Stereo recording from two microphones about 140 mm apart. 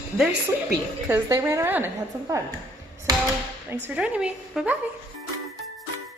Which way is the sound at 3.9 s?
5° right (ahead or behind).